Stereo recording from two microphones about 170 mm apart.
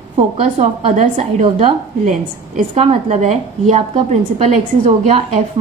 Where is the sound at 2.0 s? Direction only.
50° right (ahead or behind).